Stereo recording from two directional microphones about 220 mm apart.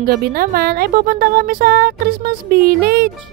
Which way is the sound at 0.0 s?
45° right (ahead or behind).